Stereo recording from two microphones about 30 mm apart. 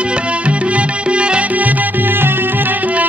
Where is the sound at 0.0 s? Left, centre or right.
Right.